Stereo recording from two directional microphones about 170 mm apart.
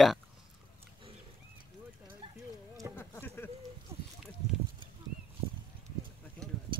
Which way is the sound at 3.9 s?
15° right (ahead or behind).